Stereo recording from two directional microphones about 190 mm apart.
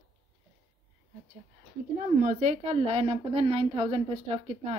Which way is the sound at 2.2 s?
40° right (ahead or behind).